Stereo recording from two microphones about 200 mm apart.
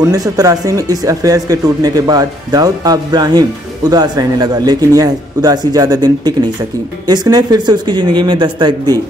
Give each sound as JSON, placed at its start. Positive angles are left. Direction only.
{"t": 0.0, "sound": "speech", "side_deg": -15}